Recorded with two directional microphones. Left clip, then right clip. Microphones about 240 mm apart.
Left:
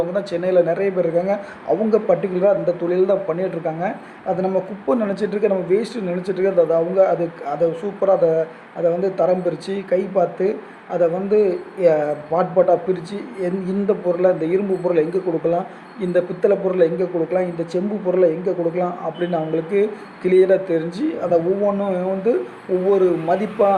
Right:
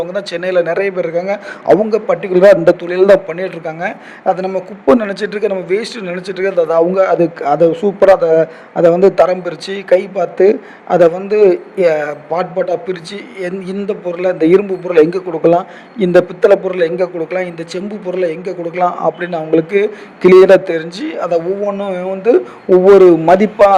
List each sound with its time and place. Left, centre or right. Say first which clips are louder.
0.0 s a man's voice: right 3 dB; right